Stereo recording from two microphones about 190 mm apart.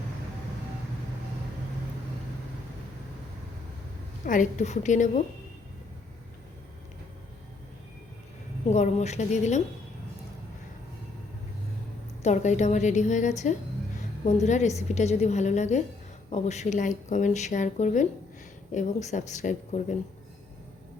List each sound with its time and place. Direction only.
4.3 s speech: 40° left (ahead or behind)
8.7 s speech: 35° left (ahead or behind)
12.2 s speech: 40° left (ahead or behind)